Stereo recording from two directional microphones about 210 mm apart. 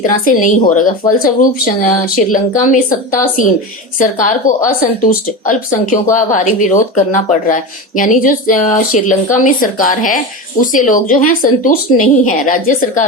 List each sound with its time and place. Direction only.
0.0 s speech: 40° left (ahead or behind)